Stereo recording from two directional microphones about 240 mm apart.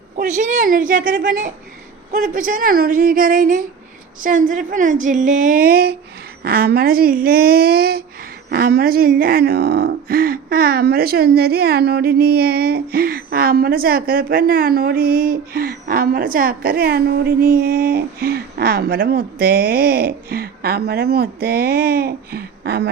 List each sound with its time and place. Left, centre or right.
0.2 s speech: right